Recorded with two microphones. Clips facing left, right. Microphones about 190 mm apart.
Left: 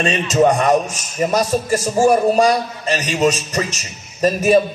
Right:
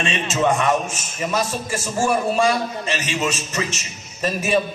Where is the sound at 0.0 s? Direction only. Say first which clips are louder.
Left 6 dB; 40° left (ahead or behind).